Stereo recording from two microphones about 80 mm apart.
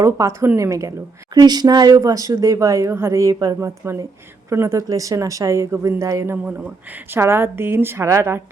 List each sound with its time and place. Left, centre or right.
0.0 s a woman's voice: right
7.1 s a woman's voice: right